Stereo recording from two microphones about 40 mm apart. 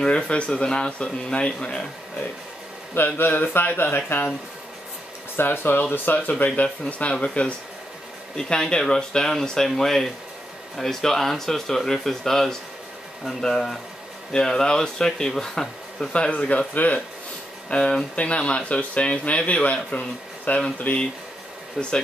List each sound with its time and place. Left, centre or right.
0.0 s speech: left
3.2 s speech: left
5.3 s speech: left
6.3 s speech: left; by 16.1 s centre
16.1 s speech: left
17.6 s speech: left
20.5 s speech: left
21.8 s speech: centre